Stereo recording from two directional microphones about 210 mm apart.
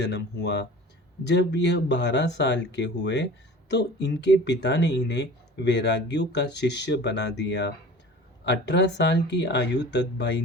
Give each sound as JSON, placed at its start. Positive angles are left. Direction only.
{"t": 0.0, "sound": "speech", "side_deg": 55}